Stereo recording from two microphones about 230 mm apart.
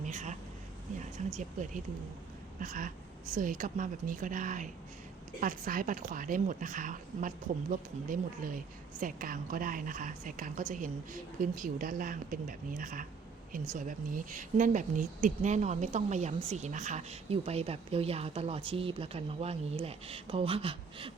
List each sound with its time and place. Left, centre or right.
0.0 s a woman's voice: right